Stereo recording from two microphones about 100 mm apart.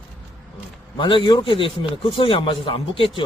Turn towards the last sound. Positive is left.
turn(degrees=60)  # may be behind; listen again after turning